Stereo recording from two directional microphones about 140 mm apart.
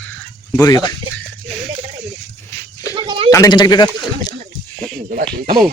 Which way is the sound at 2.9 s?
35° right (ahead or behind).